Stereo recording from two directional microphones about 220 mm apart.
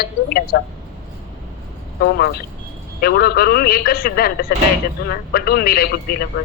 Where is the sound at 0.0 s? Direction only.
45° left (ahead or behind).